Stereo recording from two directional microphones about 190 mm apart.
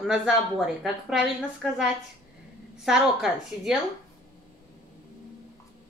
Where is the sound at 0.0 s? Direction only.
5° right (ahead or behind).